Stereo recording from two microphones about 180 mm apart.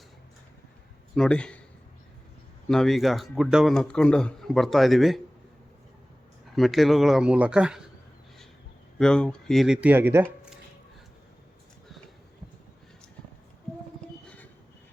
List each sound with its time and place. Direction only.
1.1 s speech: 5° left (ahead or behind)
2.6 s speech: centre (ahead or behind)
6.6 s speech: centre (ahead or behind)
9.0 s speech: 5° left (ahead or behind); by 10.2 s 10° right (ahead or behind)